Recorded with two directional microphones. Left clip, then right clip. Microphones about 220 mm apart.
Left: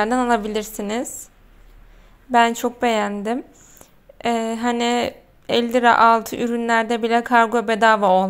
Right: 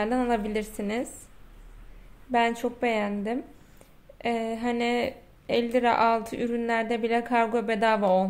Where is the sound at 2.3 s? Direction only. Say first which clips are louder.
Left 8 dB; 15° left (ahead or behind).